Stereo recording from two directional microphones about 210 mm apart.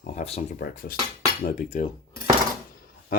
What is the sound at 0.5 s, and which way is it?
Speech, 45° left (ahead or behind).